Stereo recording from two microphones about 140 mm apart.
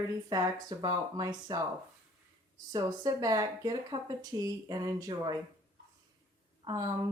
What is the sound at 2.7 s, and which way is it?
Speech, 30° right (ahead or behind).